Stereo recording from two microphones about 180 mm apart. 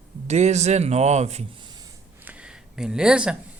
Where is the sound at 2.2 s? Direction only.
5° right (ahead or behind).